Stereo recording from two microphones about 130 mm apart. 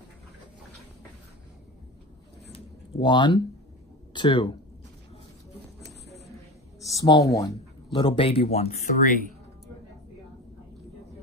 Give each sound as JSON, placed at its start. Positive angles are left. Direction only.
{"t": 2.5, "sound": "a sound", "side_deg": 35}
{"t": 4.1, "sound": "speech", "side_deg": 35}
{"t": 6.8, "sound": "speech", "side_deg": 25}
{"t": 9.0, "sound": "speech", "side_deg": 90}